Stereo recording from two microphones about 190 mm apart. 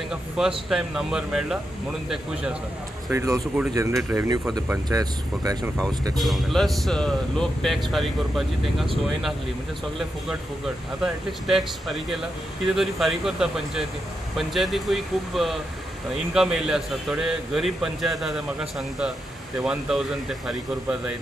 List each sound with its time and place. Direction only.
0.1 s a man's voice: 5° right (ahead or behind)
3.1 s speech: 15° right (ahead or behind)
6.1 s a man's voice: centre (ahead or behind)
11.4 s a man's voice: centre (ahead or behind)